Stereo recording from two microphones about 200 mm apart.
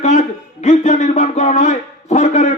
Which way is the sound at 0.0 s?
35° left (ahead or behind).